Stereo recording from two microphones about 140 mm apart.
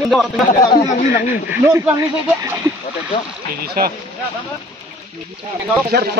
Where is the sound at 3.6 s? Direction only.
90° right.